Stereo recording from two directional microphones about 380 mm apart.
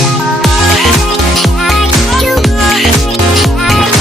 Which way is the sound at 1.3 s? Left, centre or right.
Centre.